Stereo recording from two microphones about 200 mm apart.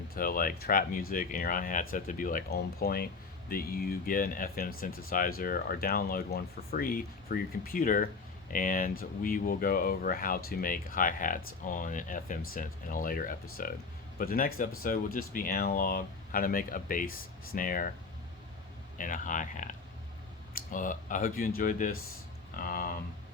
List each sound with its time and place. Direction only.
0.1 s speech: 45° left (ahead or behind)
18.9 s speech: 40° left (ahead or behind)